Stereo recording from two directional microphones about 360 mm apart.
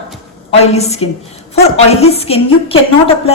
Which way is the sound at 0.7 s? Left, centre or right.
Centre.